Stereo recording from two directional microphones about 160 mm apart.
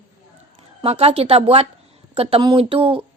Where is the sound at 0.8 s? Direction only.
40° right (ahead or behind).